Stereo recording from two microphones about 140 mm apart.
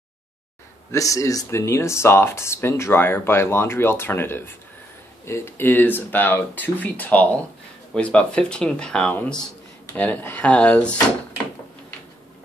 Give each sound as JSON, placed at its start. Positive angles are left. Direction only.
{"t": 0.9, "sound": "speech", "side_deg": 25}